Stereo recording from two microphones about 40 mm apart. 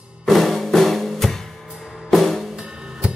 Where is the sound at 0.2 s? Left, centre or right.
Centre.